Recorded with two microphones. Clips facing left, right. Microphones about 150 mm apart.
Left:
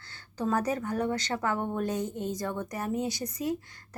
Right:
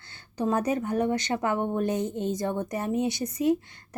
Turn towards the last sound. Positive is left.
turn(degrees=-25)  # may be behind; listen again after turning